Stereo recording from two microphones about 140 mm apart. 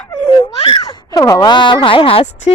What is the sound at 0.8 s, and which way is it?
Speech, 30° left (ahead or behind).